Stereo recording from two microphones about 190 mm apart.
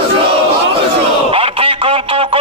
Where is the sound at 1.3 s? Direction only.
30° right (ahead or behind).